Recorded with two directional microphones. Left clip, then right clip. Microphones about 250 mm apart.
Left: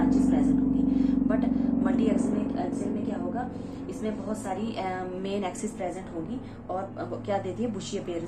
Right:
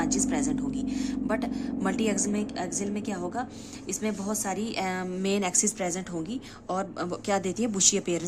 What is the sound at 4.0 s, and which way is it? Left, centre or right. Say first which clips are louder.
A woman's voice: right 2 dB; right.